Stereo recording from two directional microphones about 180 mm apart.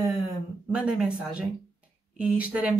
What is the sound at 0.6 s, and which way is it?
Speech, 5° right (ahead or behind).